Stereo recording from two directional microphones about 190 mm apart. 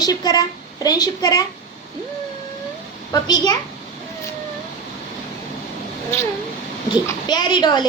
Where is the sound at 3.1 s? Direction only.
20° left (ahead or behind).